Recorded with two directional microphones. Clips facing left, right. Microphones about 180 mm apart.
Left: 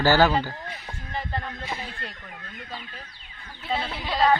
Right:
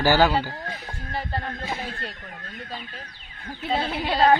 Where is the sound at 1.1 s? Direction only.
35° right (ahead or behind).